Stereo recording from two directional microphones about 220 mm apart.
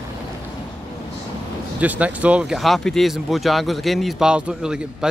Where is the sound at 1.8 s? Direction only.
5° right (ahead or behind).